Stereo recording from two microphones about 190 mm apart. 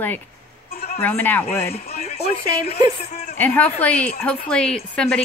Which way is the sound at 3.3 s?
10° left (ahead or behind).